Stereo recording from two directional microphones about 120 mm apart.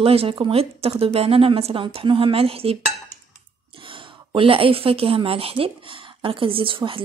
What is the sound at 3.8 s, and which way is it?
A woman's voice, 45° right (ahead or behind).